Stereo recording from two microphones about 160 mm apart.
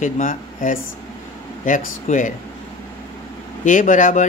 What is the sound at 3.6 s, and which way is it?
Speech, 55° left (ahead or behind).